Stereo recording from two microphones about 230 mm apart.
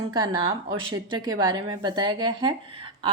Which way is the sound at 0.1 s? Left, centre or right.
Centre.